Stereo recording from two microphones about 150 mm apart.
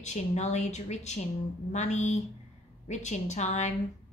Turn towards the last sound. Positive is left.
turn(degrees=50)  # may be behind; listen again after turning